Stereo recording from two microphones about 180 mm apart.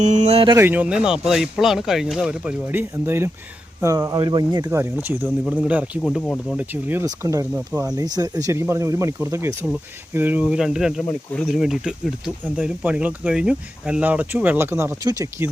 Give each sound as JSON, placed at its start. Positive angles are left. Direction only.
{"t": 0.0, "sound": "speech", "side_deg": -40}
{"t": 0.5, "sound": "speech", "side_deg": -10}
{"t": 6.0, "sound": "speech", "side_deg": 5}
{"t": 6.6, "sound": "speech", "side_deg": -10}